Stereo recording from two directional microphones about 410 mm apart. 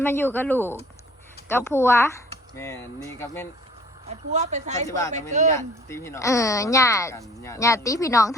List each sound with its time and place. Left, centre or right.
0.0 s speech: centre
4.1 s speech: centre
5.9 s speech: centre